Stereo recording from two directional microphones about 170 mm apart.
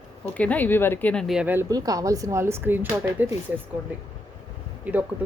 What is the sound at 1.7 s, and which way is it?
Speech, 20° right (ahead or behind).